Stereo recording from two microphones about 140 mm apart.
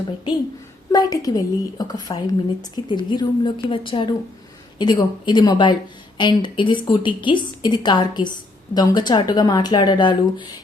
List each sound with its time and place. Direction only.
0.9 s a woman's voice: 25° left (ahead or behind)